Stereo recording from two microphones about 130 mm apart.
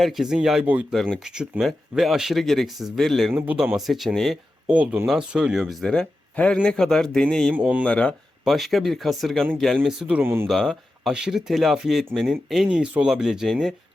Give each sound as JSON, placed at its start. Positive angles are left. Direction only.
{"t": 0.0, "sound": "speech", "side_deg": 0}
{"t": 3.3, "sound": "speech", "side_deg": -10}
{"t": 3.8, "sound": "speech", "side_deg": 0}
{"t": 10.2, "sound": "speech", "side_deg": -15}
{"t": 10.4, "sound": "speech", "side_deg": 5}